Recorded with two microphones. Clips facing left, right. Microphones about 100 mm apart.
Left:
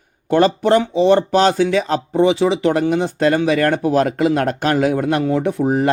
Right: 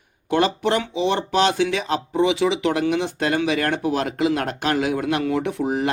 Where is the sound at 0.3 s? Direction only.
40° left (ahead or behind).